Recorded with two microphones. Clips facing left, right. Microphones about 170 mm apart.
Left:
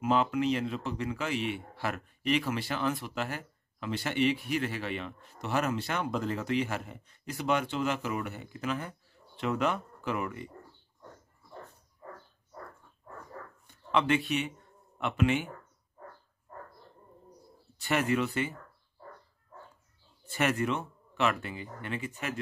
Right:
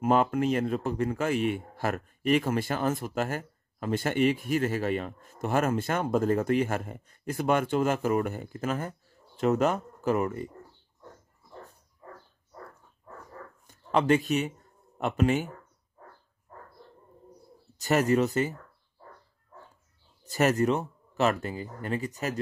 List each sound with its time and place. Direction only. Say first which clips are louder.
0.0 s a man's voice: right 3 dB; 50° right (ahead or behind)
13.7 s speech: right 4 dB; 40° right (ahead or behind)
17.7 s speech: right 5 dB; 40° right (ahead or behind)
20.2 s speech: right 5 dB; 40° right (ahead or behind)